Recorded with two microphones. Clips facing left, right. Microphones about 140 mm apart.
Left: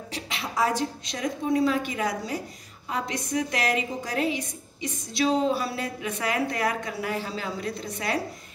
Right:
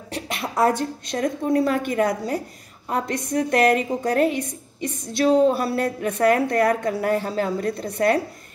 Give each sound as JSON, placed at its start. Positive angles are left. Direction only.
{"t": 0.1, "sound": "a woman's voice", "side_deg": -55}